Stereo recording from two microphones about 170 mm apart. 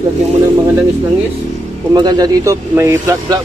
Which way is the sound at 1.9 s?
25° right (ahead or behind).